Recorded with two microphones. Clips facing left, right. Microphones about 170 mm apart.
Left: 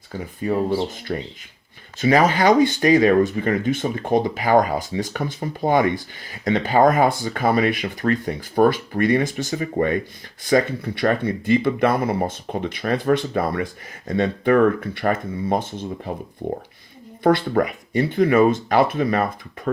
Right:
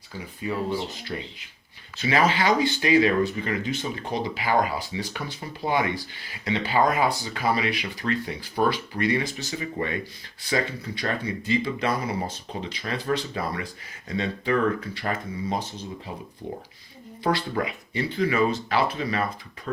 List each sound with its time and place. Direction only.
0.5 s speech: 35° left (ahead or behind)
0.9 s speech: 50° left (ahead or behind)
17.2 s speech: 50° left (ahead or behind)